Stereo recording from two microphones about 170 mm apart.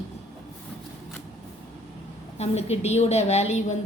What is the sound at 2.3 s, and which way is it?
A woman's voice, 40° left (ahead or behind).